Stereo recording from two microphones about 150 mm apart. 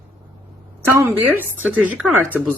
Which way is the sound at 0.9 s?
15° right (ahead or behind).